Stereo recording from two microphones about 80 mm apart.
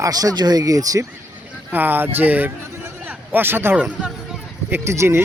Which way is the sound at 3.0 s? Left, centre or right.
Right.